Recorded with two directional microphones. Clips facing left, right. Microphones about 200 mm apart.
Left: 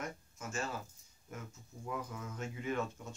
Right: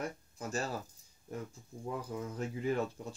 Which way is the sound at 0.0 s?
35° right (ahead or behind).